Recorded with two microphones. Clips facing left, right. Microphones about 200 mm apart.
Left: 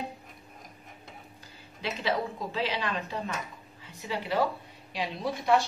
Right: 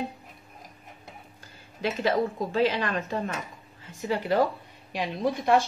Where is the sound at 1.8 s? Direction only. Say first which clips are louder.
Right 5 dB; 50° right (ahead or behind).